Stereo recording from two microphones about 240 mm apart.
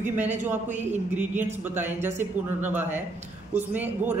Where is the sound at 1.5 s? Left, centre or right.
Centre.